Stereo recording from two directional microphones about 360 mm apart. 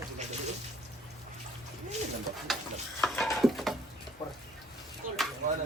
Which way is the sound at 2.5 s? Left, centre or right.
Centre.